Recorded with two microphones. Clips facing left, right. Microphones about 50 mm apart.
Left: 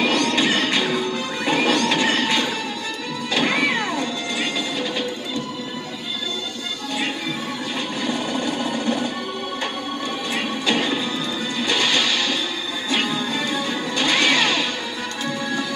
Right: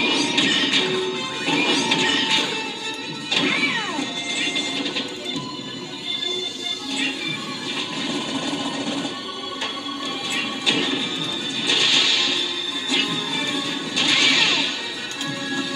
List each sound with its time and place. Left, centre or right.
0.0 s music: left
3.9 s music: left
8.5 s music: left
10.7 s music: left